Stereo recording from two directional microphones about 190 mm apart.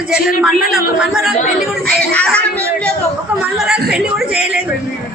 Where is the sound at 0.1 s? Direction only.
5° right (ahead or behind).